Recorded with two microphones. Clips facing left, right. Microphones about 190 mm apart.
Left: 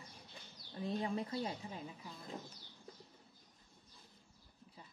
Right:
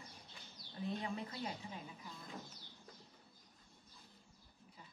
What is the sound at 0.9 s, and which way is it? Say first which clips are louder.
Speech: left 5 dB; 35° left (ahead or behind).